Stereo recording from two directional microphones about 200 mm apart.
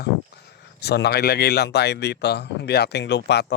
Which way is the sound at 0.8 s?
55° left (ahead or behind).